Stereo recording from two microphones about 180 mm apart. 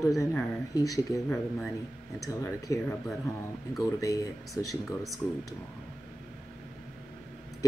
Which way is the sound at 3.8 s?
20° left (ahead or behind).